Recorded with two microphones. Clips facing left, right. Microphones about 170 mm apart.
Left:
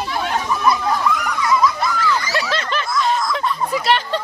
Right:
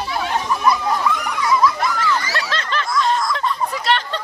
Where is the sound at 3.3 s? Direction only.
10° left (ahead or behind).